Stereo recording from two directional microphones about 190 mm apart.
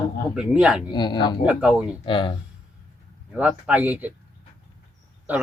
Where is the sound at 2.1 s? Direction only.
25° left (ahead or behind).